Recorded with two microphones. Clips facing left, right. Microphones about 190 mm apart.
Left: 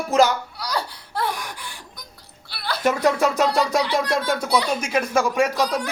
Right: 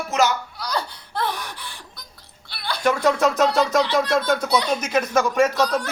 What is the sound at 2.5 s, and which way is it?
Speech, 5° left (ahead or behind).